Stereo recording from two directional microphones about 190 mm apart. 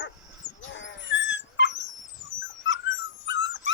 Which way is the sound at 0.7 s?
75° left (ahead or behind).